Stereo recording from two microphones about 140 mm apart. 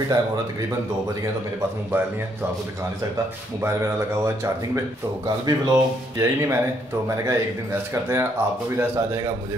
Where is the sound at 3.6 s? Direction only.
20° right (ahead or behind).